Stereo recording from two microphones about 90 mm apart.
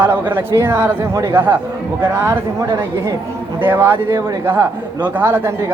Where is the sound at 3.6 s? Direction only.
25° right (ahead or behind).